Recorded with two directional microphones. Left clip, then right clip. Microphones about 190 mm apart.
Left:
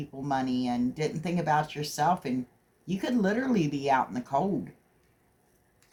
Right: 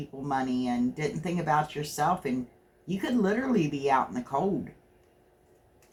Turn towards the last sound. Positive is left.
turn(degrees=35)  # may be behind; listen again after turning